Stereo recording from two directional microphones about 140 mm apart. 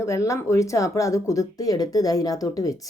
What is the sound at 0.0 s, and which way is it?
Speech, 20° left (ahead or behind).